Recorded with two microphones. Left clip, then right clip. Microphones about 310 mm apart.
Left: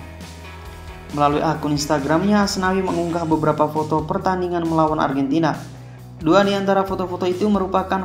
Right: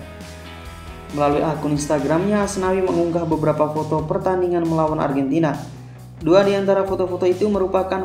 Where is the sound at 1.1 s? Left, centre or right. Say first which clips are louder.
Left 1 dB; left.